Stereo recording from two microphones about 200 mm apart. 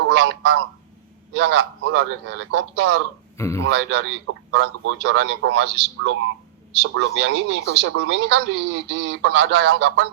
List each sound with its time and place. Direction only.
0.1 s speech: 65° right (ahead or behind)
3.3 s speech: 15° left (ahead or behind)
3.6 s speech: 65° right (ahead or behind)